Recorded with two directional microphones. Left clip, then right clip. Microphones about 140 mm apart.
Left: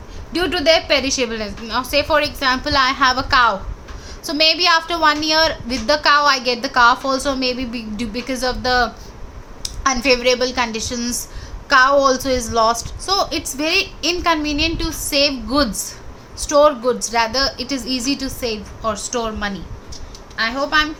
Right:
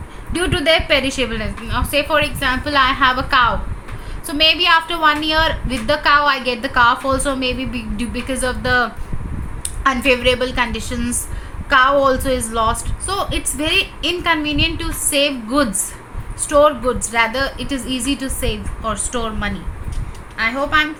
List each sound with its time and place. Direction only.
0.3 s a woman's voice: 25° left (ahead or behind)